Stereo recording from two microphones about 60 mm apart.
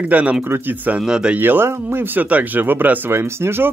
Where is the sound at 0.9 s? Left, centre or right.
Centre.